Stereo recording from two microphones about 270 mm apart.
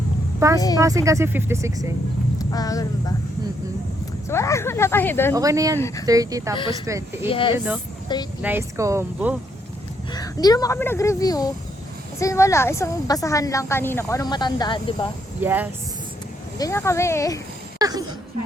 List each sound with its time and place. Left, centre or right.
0.3 s a woman's voice: centre
2.4 s speech: centre
4.3 s speech: centre
5.3 s speech: centre
5.8 s speech: centre
6.1 s speech: centre
7.3 s speech: centre
8.4 s speech: centre
10.1 s speech: centre
15.4 s speech: centre
16.6 s speech: centre
17.7 s a sound: centre